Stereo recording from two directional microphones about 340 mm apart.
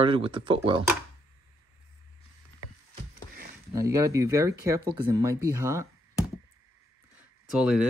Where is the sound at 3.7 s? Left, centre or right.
Centre.